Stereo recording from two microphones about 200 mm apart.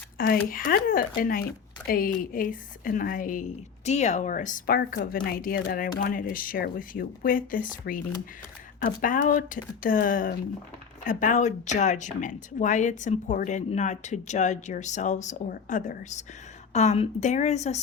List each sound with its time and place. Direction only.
0.2 s speech: 45° left (ahead or behind)
8.8 s speech: 40° left (ahead or behind)